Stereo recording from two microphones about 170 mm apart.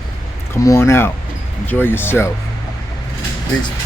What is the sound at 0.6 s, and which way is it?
Speech, 15° left (ahead or behind).